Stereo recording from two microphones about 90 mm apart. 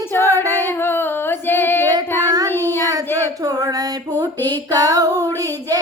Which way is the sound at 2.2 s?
40° right (ahead or behind).